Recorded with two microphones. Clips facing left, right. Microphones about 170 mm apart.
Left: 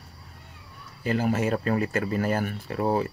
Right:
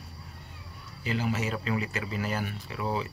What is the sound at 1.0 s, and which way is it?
Speech, 50° left (ahead or behind).